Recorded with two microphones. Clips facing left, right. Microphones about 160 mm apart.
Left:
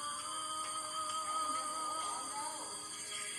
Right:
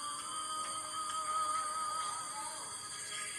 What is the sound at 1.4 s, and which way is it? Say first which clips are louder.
Music: right 2 dB; 10° left (ahead or behind).